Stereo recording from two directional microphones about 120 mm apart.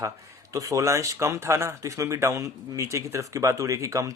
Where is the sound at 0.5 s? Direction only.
25° right (ahead or behind).